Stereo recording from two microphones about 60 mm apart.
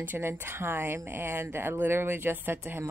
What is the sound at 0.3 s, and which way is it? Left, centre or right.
Speech, right.